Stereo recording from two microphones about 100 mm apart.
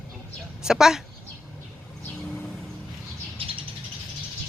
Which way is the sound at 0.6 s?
5° right (ahead or behind).